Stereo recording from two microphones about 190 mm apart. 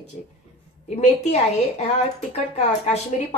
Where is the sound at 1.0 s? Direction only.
35° left (ahead or behind).